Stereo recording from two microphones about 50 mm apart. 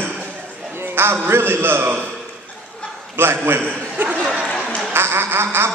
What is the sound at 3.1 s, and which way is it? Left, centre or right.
Speech, right.